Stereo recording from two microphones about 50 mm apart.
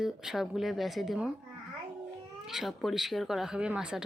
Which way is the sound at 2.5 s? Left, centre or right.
Centre.